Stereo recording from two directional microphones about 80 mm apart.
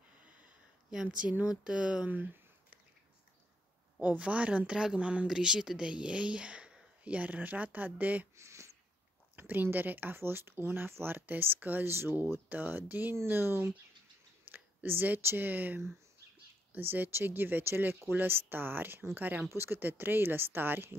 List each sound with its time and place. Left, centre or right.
1.0 s speech: centre
4.0 s speech: centre
8.4 s a sound: right
9.3 s speech: right